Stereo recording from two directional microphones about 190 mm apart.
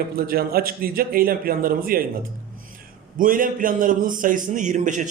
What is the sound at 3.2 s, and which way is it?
Speech, 45° right (ahead or behind).